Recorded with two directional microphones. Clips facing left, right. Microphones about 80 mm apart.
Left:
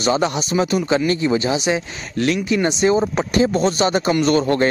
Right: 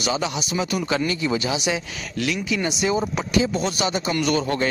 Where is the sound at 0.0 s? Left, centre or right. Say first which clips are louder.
Left 6 dB; left.